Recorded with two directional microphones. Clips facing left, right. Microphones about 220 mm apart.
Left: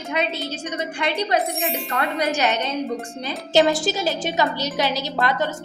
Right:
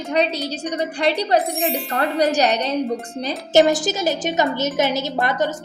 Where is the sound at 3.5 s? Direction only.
15° right (ahead or behind).